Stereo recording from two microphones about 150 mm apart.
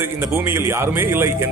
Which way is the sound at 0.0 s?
15° right (ahead or behind).